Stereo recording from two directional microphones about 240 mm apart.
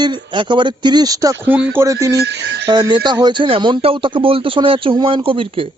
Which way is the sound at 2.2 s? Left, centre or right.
Right.